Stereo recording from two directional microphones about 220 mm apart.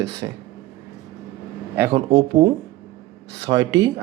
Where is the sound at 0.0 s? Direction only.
55° right (ahead or behind).